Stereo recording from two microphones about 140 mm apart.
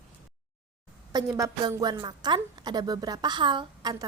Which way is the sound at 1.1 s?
25° right (ahead or behind).